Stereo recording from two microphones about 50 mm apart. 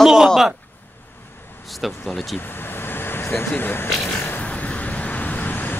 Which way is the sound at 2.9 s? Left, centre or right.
Left.